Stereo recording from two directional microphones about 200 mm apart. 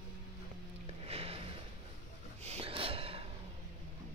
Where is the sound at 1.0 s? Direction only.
30° right (ahead or behind).